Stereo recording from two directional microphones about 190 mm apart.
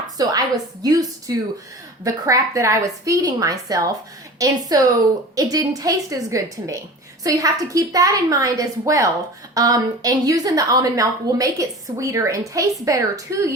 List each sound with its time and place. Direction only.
0.2 s a woman's voice: 20° right (ahead or behind)